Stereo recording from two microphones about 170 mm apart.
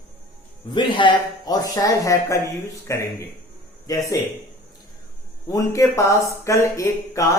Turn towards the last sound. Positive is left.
turn(degrees=20)  # may be behind; listen again after turning